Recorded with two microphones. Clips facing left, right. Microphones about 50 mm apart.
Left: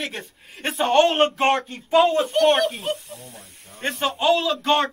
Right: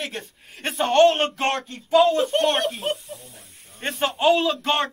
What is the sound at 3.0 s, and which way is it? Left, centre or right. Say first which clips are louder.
Snake: even; left.